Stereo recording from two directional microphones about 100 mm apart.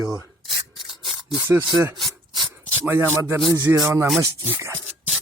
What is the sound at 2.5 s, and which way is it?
Speech, 25° right (ahead or behind).